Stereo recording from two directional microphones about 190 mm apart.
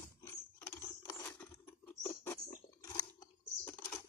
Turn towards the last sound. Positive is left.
turn(degrees=10)  # may be behind; listen again after turning